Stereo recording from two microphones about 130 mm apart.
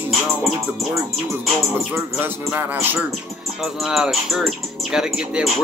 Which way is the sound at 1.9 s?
15° right (ahead or behind).